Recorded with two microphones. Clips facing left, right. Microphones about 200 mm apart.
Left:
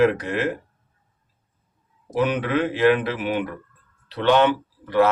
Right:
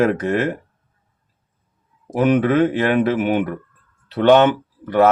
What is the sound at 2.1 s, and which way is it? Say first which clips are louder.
Speech: right 6 dB; 50° right (ahead or behind).